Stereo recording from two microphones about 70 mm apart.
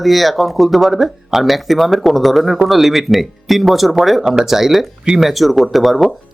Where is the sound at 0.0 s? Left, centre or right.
Centre.